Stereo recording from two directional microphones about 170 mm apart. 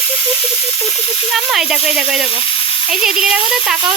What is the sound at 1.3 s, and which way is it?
Hiss, centre (ahead or behind).